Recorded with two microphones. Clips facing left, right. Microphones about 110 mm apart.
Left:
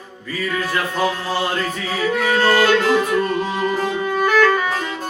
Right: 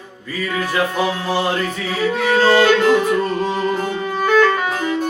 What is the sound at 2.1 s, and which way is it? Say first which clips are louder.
Music: right 2 dB; 20° right (ahead or behind).